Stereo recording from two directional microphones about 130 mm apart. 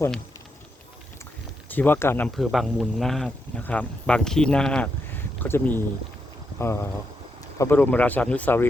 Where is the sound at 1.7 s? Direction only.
15° left (ahead or behind).